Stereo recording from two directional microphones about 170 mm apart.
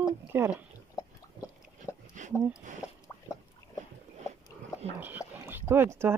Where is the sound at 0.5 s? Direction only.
20° left (ahead or behind).